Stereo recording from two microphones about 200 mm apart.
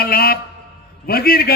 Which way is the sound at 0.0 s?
50° left (ahead or behind).